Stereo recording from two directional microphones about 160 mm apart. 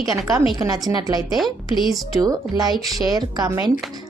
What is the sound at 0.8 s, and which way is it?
Speech, 25° right (ahead or behind).